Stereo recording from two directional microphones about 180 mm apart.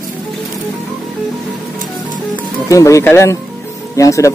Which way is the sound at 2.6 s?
15° left (ahead or behind).